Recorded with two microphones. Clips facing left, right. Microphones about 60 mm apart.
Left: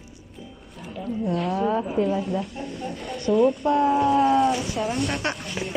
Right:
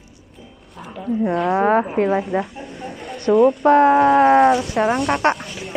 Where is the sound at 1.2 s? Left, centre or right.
Right.